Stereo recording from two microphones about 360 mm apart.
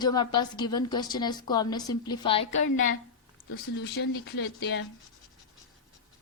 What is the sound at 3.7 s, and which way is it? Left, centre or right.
Speech, left.